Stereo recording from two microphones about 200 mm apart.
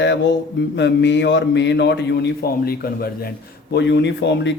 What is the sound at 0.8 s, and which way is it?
A man's voice, 60° left (ahead or behind).